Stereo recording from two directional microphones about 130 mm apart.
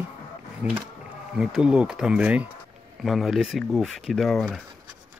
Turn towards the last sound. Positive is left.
turn(degrees=0)  # may be behind; listen again after turning